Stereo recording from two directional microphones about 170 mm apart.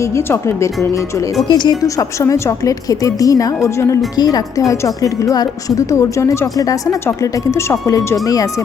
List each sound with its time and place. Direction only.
0.3 s speech: 15° left (ahead or behind)
1.5 s a woman's voice: 25° left (ahead or behind)